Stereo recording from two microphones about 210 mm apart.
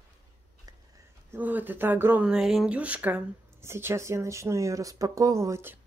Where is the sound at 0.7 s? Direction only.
15° right (ahead or behind).